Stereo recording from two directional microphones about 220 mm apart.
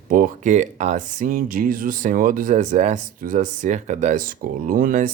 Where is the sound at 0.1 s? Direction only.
40° right (ahead or behind).